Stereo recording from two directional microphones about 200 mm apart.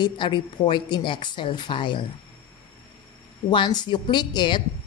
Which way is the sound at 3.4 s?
20° left (ahead or behind).